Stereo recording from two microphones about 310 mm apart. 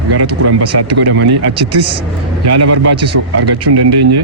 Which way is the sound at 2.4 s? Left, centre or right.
Right.